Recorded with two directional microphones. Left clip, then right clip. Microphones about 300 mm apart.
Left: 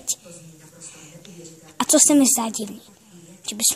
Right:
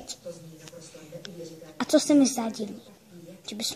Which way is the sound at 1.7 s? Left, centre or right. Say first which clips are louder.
Left 4 dB; left.